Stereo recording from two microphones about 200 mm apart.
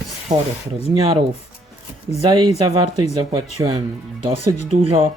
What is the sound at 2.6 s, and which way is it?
Speech, 25° right (ahead or behind).